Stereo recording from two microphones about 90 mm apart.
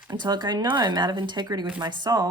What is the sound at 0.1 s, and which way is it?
A woman's voice, 55° right (ahead or behind).